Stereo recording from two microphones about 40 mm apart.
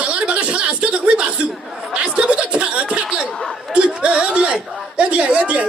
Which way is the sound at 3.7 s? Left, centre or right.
Right.